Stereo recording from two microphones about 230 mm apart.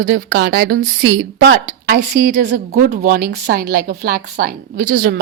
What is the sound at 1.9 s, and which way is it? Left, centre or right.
A woman's voice, right.